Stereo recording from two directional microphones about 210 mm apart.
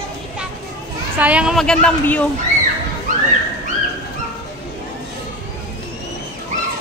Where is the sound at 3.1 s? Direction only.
40° right (ahead or behind).